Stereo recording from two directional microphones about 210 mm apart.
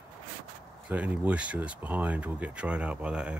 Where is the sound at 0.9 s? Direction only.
5° right (ahead or behind).